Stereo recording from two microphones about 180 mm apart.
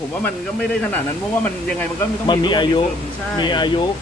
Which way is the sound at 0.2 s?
5° left (ahead or behind).